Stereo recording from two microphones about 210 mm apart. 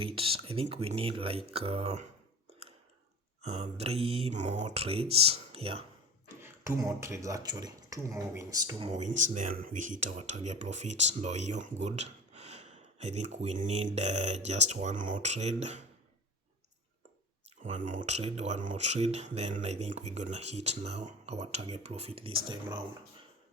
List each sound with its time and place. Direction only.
0.0 s mantra: 25° right (ahead or behind)
3.4 s mantra: 30° right (ahead or behind)
6.2 s speech: 15° right (ahead or behind)
8.9 s speech: 35° right (ahead or behind)
17.6 s speech: 40° right (ahead or behind)